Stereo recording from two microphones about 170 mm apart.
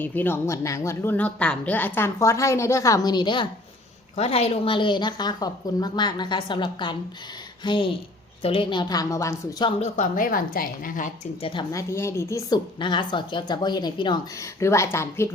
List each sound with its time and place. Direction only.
0.0 s a woman's voice: 10° left (ahead or behind)
9.6 s a woman's voice: 40° left (ahead or behind)
10.2 s a woman's voice: 55° left (ahead or behind)
11.7 s a woman's voice: 15° left (ahead or behind)